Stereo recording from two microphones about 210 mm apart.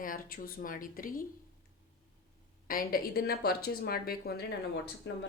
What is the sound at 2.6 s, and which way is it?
A woman's voice, 45° left (ahead or behind).